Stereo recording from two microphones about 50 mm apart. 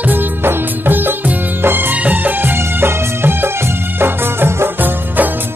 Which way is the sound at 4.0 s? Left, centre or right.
Right.